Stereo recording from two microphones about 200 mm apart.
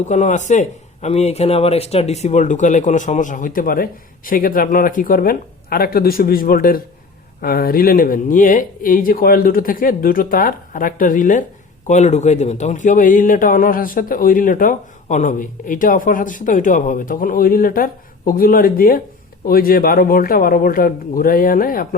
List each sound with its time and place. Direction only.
0.0 s a man's voice: 35° left (ahead or behind)